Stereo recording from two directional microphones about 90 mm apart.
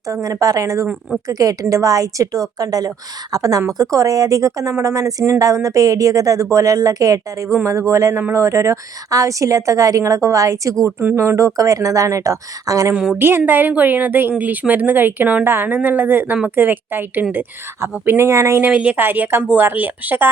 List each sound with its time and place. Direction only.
0.1 s a woman's voice: 40° right (ahead or behind)
12.9 s a woman's voice: 10° right (ahead or behind)
13.1 s speech: 25° right (ahead or behind)
18.6 s speech: 15° right (ahead or behind)